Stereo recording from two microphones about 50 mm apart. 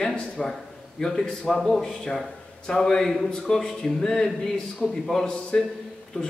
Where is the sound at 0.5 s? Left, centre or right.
Centre.